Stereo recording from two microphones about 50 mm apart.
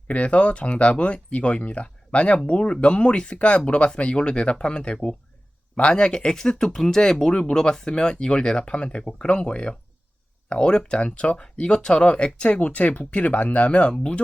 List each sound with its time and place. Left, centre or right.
0.1 s speech: left